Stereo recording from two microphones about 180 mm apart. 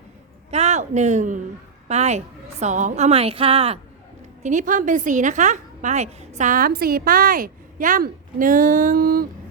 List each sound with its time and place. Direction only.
0.5 s a woman's voice: 40° right (ahead or behind)
4.4 s a woman's voice: 45° right (ahead or behind)